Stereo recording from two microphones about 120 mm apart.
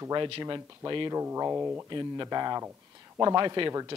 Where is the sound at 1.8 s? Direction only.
35° right (ahead or behind).